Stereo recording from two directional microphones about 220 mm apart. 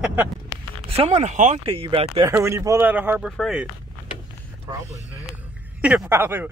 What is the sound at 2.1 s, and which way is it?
Speech, 15° right (ahead or behind).